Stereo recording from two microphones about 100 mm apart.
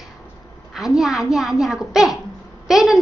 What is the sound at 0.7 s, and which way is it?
A woman's voice, 5° right (ahead or behind).